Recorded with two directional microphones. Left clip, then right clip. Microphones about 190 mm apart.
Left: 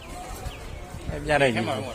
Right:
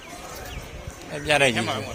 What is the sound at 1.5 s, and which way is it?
Speech, 50° left (ahead or behind).